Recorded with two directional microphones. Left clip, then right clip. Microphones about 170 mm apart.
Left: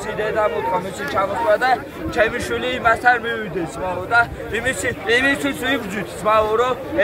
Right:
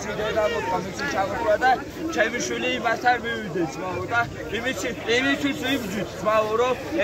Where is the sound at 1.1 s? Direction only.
20° left (ahead or behind).